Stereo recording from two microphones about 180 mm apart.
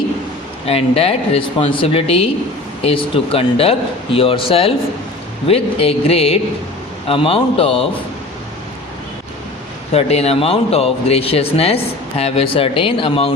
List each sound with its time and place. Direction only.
0.7 s speech: 35° left (ahead or behind)
9.9 s speech: 35° left (ahead or behind)